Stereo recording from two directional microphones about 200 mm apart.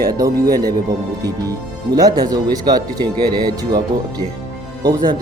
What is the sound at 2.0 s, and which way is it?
Speech, 20° right (ahead or behind).